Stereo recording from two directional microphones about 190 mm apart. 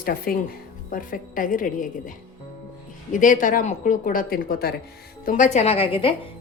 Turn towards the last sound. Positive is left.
turn(degrees=30)  # may be behind; listen again after turning